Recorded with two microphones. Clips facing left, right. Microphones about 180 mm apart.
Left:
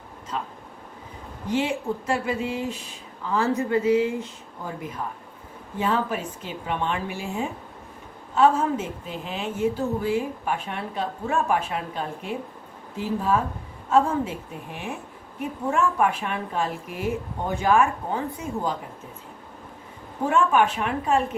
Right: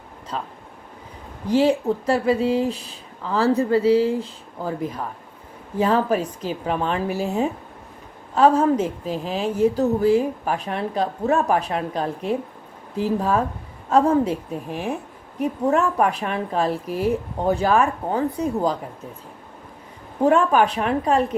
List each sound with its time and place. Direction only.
0.3 s a woman's voice: 35° right (ahead or behind)
5.7 s a woman's voice: 35° right (ahead or behind)
20.2 s a woman's voice: 35° right (ahead or behind)